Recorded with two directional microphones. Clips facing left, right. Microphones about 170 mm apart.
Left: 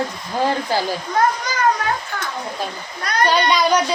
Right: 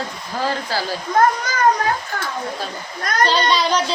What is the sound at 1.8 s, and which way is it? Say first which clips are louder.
Speech: right 2 dB; 40° right (ahead or behind).